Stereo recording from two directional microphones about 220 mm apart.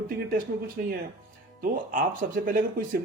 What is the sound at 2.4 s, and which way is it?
Speech, 40° right (ahead or behind).